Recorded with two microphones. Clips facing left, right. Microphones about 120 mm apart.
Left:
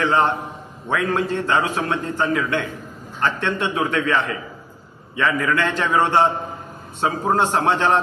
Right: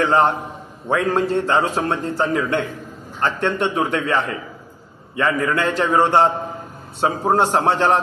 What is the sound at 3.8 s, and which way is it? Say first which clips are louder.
Speech: right 1 dB; 35° right (ahead or behind).